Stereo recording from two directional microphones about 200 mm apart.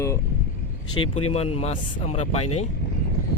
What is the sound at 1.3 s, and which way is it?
Speech, 30° left (ahead or behind).